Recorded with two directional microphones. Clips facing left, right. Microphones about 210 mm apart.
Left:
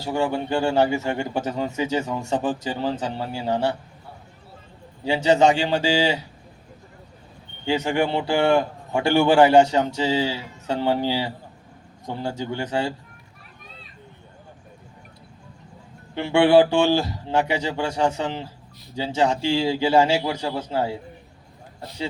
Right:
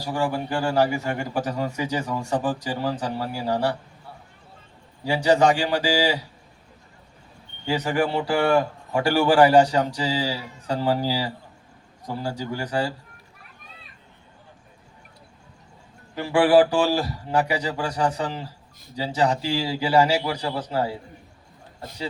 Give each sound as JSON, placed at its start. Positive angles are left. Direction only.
{"t": 0.0, "sound": "a man's voice", "side_deg": 25}
{"t": 5.0, "sound": "a man's voice", "side_deg": 25}
{"t": 7.6, "sound": "a man's voice", "side_deg": 25}
{"t": 16.1, "sound": "a man's voice", "side_deg": 25}